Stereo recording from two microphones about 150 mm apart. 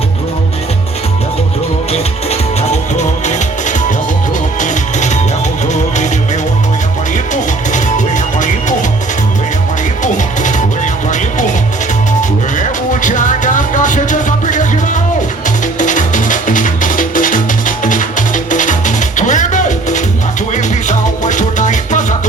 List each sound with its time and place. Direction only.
3.0 s music: 55° left (ahead or behind)
7.7 s music: 55° left (ahead or behind)
11.1 s music: 55° left (ahead or behind)
12.5 s music: 60° left (ahead or behind)
15.8 s music: 55° left (ahead or behind)